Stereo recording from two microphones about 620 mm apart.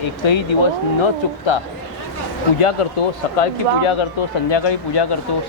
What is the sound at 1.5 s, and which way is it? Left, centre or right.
Speech, left.